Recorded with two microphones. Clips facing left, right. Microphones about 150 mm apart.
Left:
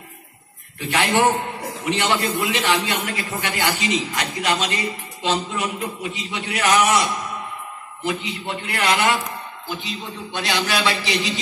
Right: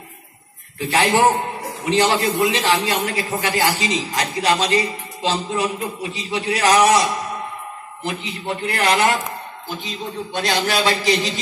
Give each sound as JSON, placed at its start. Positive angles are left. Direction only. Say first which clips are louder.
{"t": 0.8, "sound": "a man's voice", "louder": "right 2 dB", "side_deg": -35}
{"t": 10.3, "sound": "a man's voice", "louder": "right 2 dB", "side_deg": -45}